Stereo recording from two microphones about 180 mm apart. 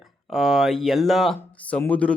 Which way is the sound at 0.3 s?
Centre (ahead or behind).